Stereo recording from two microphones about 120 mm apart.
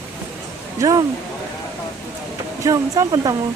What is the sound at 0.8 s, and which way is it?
Speech, 30° right (ahead or behind).